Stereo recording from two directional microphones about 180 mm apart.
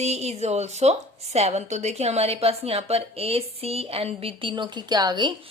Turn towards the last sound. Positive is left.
turn(degrees=-25)  # may be behind; listen again after turning